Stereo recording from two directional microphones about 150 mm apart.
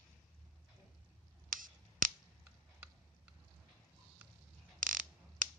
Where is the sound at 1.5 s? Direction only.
65° right (ahead or behind).